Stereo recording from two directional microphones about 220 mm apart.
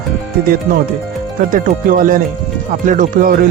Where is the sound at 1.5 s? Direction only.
40° right (ahead or behind).